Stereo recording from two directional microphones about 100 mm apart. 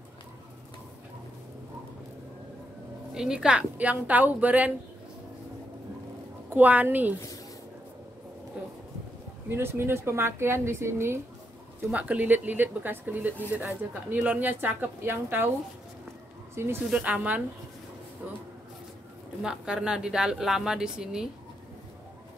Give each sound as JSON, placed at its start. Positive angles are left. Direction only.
{"t": 3.2, "sound": "a woman's voice", "side_deg": -5}
{"t": 6.5, "sound": "a woman's voice", "side_deg": -15}
{"t": 9.5, "sound": "speech", "side_deg": -25}
{"t": 11.9, "sound": "a woman's voice", "side_deg": -15}
{"t": 16.6, "sound": "speech", "side_deg": -25}
{"t": 16.9, "sound": "a woman's voice", "side_deg": -15}
{"t": 19.4, "sound": "a woman's voice", "side_deg": -10}